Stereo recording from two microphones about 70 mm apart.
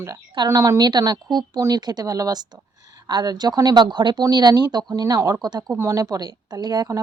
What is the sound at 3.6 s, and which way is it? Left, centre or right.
Speech, right.